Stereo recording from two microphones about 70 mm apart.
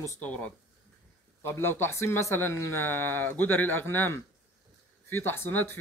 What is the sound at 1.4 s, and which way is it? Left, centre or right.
Speech, left.